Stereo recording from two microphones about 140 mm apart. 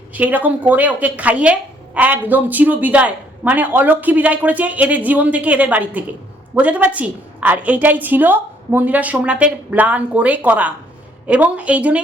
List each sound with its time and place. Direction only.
0.1 s a woman's voice: 10° right (ahead or behind)